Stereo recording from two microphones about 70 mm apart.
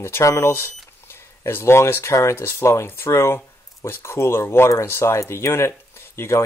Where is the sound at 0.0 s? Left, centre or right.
Left.